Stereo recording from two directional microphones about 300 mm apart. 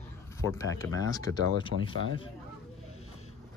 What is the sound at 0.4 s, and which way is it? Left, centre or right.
Speech, centre.